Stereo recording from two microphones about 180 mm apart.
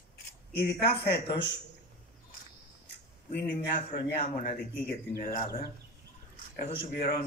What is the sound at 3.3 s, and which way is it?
Speech, 65° left (ahead or behind).